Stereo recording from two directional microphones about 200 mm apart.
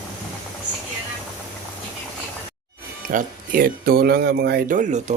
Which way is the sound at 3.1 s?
50° right (ahead or behind).